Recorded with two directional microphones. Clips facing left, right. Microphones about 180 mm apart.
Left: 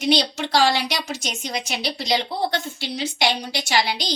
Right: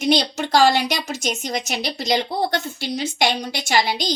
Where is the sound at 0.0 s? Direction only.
45° right (ahead or behind).